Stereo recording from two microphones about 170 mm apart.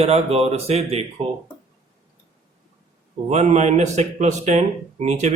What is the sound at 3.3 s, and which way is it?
A man's voice, 40° right (ahead or behind).